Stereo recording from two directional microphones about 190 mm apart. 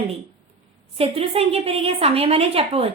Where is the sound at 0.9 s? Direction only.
30° right (ahead or behind).